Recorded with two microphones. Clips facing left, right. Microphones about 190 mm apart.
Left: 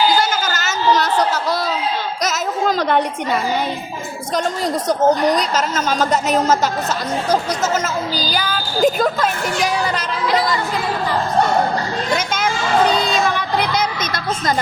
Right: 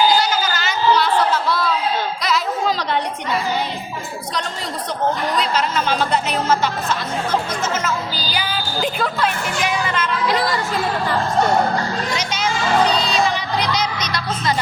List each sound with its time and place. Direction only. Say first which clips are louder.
0.2 s a sound: left 1 dB; 45° left (ahead or behind)
4.9 s a woman's voice: left 6 dB; 45° left (ahead or behind)
12.1 s speech: left 4 dB; 50° left (ahead or behind)
13.1 s music: left 1 dB; 50° left (ahead or behind)